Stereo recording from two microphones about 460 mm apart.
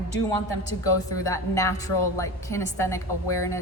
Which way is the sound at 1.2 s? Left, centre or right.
Centre.